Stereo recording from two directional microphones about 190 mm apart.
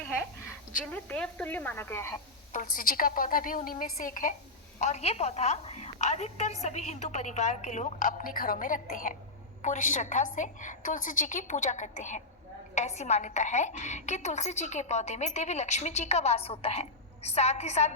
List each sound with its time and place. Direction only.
0.9 s a woman's voice: 5° left (ahead or behind)
2.5 s a woman's voice: 45° left (ahead or behind)